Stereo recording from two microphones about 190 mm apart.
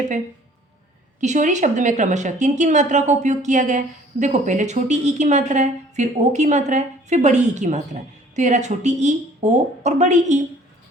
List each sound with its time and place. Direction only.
1.2 s a woman's voice: 40° right (ahead or behind)